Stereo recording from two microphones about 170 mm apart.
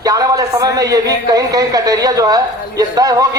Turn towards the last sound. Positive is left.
turn(degrees=-20)  # may be behind; listen again after turning